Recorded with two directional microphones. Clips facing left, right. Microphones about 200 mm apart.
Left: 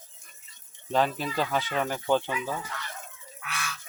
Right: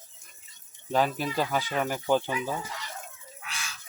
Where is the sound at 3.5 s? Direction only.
60° left (ahead or behind).